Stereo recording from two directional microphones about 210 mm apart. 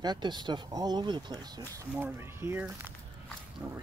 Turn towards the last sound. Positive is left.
turn(degrees=-10)  # may be behind; listen again after turning